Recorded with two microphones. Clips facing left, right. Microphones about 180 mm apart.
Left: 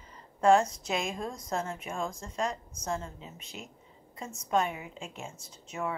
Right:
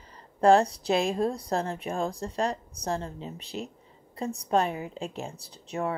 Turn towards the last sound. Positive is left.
turn(degrees=-35)  # may be behind; listen again after turning